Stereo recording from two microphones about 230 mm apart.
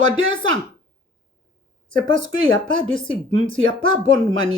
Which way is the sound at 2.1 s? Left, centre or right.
Right.